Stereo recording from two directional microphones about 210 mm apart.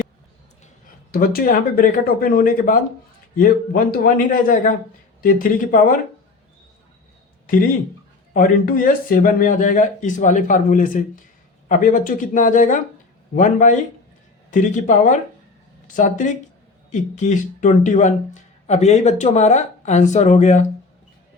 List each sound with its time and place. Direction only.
1.1 s speech: 45° left (ahead or behind)
8.3 s speech: 40° left (ahead or behind)